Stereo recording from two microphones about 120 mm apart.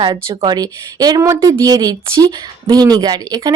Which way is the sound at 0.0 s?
35° right (ahead or behind).